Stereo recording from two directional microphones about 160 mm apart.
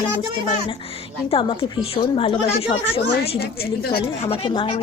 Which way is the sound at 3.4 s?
75° left (ahead or behind).